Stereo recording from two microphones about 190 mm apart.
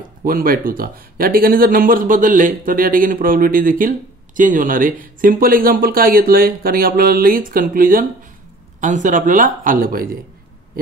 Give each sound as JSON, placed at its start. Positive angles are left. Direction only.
{"t": 0.2, "sound": "speech", "side_deg": -50}